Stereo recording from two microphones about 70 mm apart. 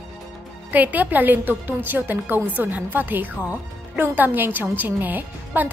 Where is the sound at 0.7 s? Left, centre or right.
Right.